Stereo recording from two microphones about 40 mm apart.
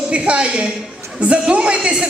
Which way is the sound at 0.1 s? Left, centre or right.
Right.